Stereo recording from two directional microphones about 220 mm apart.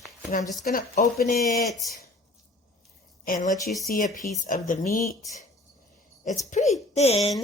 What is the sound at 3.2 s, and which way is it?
Speech, 40° left (ahead or behind).